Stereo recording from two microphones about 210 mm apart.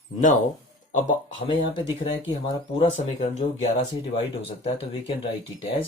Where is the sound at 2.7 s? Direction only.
35° left (ahead or behind).